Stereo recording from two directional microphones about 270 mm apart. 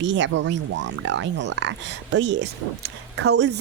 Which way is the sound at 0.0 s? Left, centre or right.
Right.